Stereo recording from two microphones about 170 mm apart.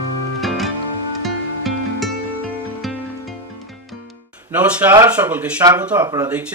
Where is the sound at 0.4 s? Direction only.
Centre (ahead or behind).